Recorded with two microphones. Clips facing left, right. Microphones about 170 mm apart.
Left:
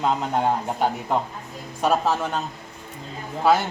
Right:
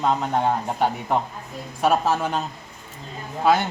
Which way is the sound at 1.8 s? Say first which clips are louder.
Right 1 dB; 5° right (ahead or behind).